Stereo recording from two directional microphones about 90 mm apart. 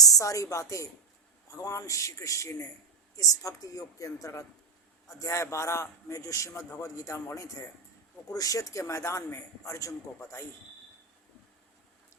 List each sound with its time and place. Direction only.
0.0 s a woman's voice: 40° left (ahead or behind)